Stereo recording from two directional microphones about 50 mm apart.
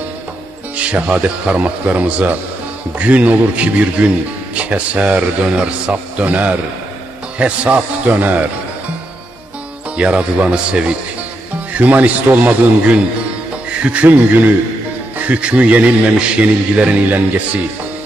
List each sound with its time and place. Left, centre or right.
0.7 s a man's voice: right
9.9 s a man's voice: right
11.7 s a man's voice: right